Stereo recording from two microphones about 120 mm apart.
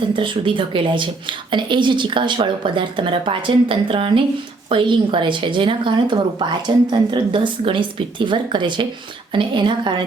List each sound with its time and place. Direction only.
0.2 s a woman's voice: 45° right (ahead or behind)